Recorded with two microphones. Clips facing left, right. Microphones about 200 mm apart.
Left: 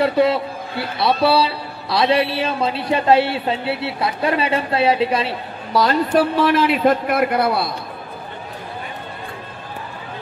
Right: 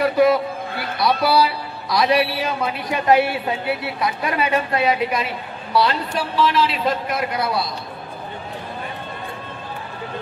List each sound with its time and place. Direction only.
0.0 s a woman's voice: 30° left (ahead or behind)
5.7 s a man's voice: 45° left (ahead or behind)